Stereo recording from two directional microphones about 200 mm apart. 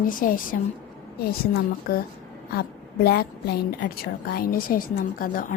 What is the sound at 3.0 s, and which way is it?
A woman's voice, 50° left (ahead or behind).